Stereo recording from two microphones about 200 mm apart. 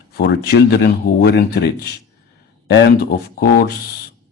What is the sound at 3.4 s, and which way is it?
Speech, 55° left (ahead or behind).